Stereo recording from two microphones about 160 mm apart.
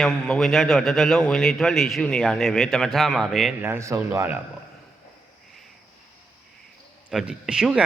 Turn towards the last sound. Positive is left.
turn(degrees=-5)  # may be behind; listen again after turning